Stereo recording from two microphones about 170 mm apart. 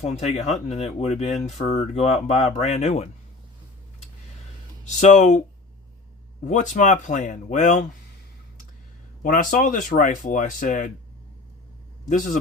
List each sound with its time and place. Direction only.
0.0 s speech: 40° left (ahead or behind)
4.9 s speech: 45° left (ahead or behind)
6.4 s speech: 45° left (ahead or behind)
9.2 s speech: 50° left (ahead or behind)
12.0 s speech: 50° left (ahead or behind)